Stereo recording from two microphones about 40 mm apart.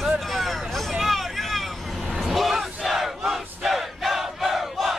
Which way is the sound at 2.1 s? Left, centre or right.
Centre.